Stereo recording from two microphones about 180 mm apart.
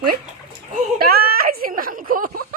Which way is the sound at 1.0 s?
55° right (ahead or behind).